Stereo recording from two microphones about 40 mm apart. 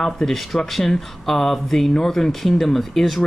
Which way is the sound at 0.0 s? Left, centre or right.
Centre.